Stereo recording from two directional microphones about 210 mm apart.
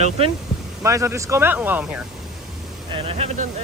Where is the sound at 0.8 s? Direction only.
15° right (ahead or behind).